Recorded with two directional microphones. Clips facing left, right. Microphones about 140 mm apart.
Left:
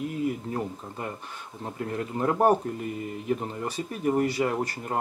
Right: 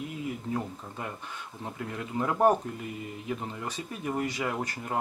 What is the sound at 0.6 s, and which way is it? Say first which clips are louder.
Speech: left 3 dB; 5° left (ahead or behind).